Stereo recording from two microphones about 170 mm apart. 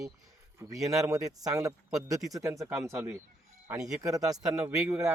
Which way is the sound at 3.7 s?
5° right (ahead or behind).